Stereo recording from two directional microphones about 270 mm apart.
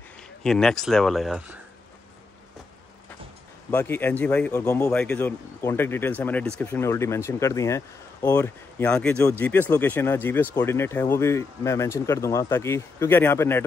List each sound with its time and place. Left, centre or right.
0.4 s speech: centre
3.7 s a man's voice: centre